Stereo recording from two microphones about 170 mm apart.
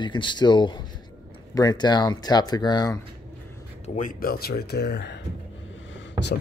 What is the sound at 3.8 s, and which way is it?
Speech, 45° left (ahead or behind).